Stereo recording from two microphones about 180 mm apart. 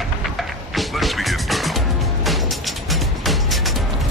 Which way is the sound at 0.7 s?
Centre (ahead or behind).